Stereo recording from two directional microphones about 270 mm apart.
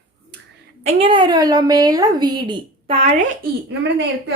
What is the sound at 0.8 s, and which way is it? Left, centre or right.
A woman's voice, centre.